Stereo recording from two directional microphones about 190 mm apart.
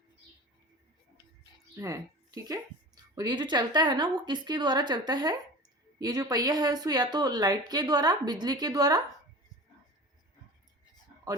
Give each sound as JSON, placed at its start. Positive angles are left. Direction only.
{"t": 1.7, "sound": "a woman's voice", "side_deg": -15}